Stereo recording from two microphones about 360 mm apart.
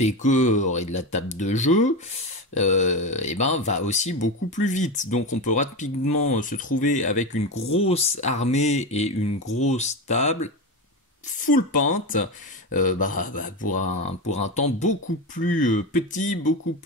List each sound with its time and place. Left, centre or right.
0.0 s speech: centre